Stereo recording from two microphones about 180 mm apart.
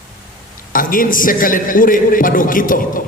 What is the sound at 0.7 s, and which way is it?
A man's voice, 50° left (ahead or behind).